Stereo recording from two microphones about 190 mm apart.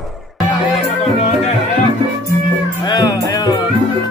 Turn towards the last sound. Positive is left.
turn(degrees=20)  # may be behind; listen again after turning